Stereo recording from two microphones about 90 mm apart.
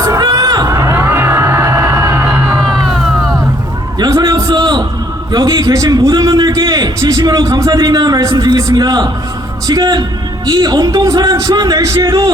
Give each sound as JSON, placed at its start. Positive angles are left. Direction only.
{"t": 0.0, "sound": "music", "side_deg": -40}
{"t": 0.7, "sound": "music", "side_deg": -25}
{"t": 2.8, "sound": "music", "side_deg": 0}
{"t": 3.9, "sound": "a sound", "side_deg": -45}
{"t": 4.4, "sound": "a sound", "side_deg": -65}
{"t": 5.3, "sound": "speech", "side_deg": -45}
{"t": 6.5, "sound": "a sound", "side_deg": -45}
{"t": 7.0, "sound": "a man's voice", "side_deg": -30}
{"t": 7.3, "sound": "speech", "side_deg": -45}